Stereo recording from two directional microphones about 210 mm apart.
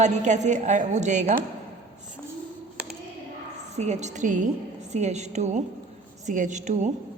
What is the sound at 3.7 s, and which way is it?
A woman's voice, 35° right (ahead or behind).